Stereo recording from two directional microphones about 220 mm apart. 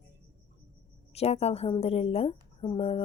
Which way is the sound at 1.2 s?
30° left (ahead or behind).